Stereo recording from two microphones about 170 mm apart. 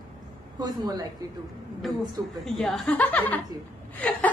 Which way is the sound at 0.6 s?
25° right (ahead or behind).